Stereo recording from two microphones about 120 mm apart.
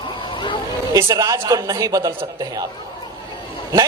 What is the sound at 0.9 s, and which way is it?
A man's voice, 30° right (ahead or behind).